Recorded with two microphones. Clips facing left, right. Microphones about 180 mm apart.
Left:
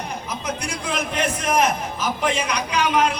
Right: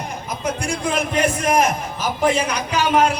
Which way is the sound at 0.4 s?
50° right (ahead or behind).